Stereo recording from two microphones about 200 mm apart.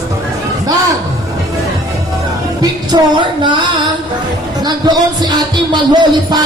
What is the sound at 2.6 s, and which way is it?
Speech, 20° right (ahead or behind).